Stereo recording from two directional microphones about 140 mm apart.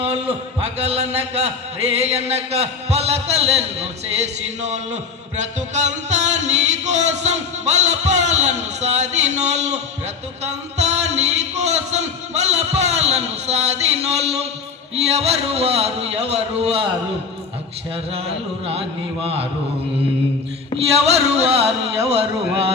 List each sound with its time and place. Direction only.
0.8 s music: 45° right (ahead or behind)
10.4 s speech: 50° right (ahead or behind)
14.9 s music: 50° right (ahead or behind)
17.9 s music: 45° right (ahead or behind)
20.9 s music: 50° right (ahead or behind)